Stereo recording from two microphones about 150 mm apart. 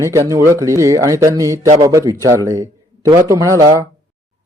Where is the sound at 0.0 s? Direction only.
20° right (ahead or behind).